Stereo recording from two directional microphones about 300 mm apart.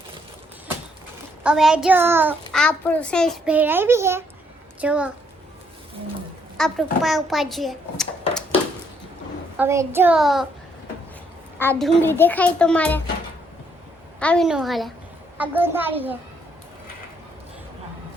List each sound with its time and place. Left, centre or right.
1.5 s a child's voice: centre
6.6 s a child's voice: centre
9.6 s a child's voice: centre
11.6 s a child's voice: centre
14.2 s a child's voice: centre